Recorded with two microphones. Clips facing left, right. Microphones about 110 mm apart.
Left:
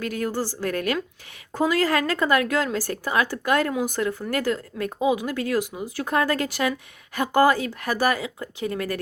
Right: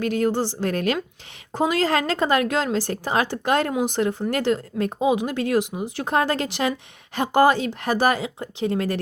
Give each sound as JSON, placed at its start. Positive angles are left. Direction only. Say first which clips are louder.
{"t": 0.0, "sound": "speech", "louder": "right 5 dB", "side_deg": -25}